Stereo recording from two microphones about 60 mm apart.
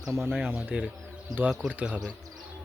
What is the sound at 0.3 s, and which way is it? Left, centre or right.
Speech, centre.